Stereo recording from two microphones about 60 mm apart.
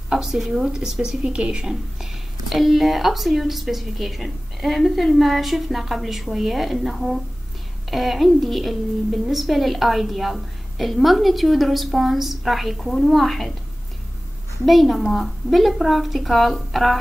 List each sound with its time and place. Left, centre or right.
0.1 s a woman's voice: centre
1.2 s a woman's voice: centre
14.7 s a woman's voice: centre